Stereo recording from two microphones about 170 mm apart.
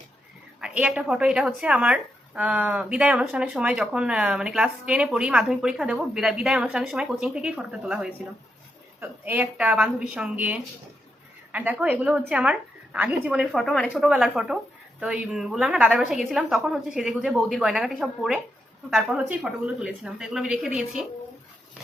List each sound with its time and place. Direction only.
0.6 s a woman's voice: 5° right (ahead or behind)
13.4 s a woman's voice: centre (ahead or behind)